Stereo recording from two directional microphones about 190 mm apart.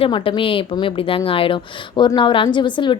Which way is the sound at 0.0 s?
25° left (ahead or behind).